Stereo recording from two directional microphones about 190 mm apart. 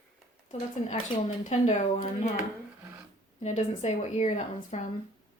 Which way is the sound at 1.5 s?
35° left (ahead or behind).